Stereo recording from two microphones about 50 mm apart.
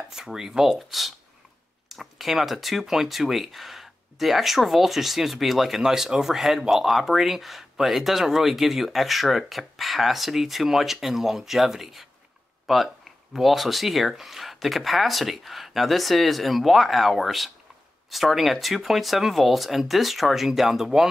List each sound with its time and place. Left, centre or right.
0.1 s speech: centre